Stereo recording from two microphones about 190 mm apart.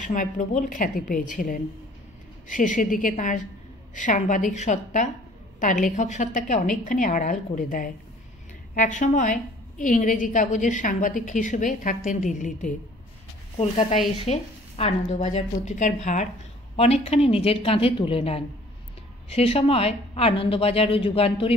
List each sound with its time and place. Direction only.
0.0 s a woman's voice: 40° left (ahead or behind)